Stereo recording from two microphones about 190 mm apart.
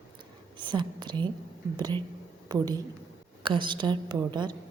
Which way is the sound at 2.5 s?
20° right (ahead or behind).